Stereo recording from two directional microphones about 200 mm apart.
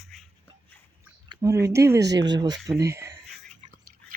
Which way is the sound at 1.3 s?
15° right (ahead or behind).